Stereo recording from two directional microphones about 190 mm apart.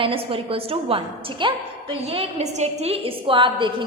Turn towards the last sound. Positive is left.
turn(degrees=-25)  # may be behind; listen again after turning